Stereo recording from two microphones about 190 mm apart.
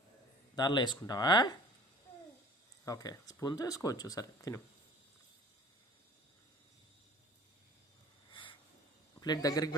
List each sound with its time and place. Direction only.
0.5 s speech: 25° left (ahead or behind)
2.8 s speech: 20° left (ahead or behind)
8.3 s a sound: 25° left (ahead or behind)
9.2 s speech: 20° left (ahead or behind)